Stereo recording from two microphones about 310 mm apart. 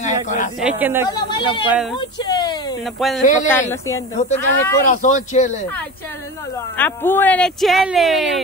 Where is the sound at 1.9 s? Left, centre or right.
Centre.